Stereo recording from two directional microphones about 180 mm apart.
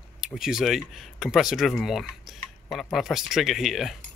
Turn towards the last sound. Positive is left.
turn(degrees=0)  # may be behind; listen again after turning